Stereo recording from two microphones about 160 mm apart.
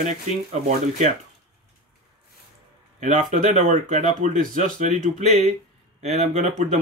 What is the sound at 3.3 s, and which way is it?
Speech, 50° right (ahead or behind).